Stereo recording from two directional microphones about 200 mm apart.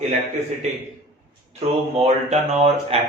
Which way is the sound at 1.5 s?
30° right (ahead or behind).